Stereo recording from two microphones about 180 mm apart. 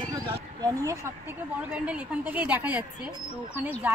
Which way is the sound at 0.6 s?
20° right (ahead or behind).